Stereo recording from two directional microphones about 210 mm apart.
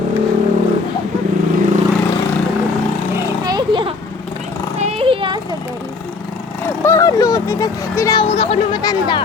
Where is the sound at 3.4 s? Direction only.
20° right (ahead or behind).